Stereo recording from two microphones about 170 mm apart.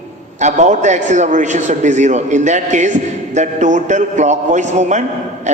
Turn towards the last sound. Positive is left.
turn(degrees=-45)  # may be behind; listen again after turning